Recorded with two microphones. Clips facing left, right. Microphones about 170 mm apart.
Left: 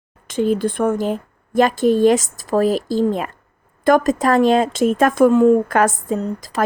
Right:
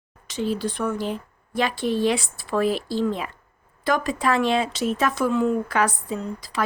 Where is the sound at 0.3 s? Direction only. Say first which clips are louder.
Left 7 dB; 50° left (ahead or behind).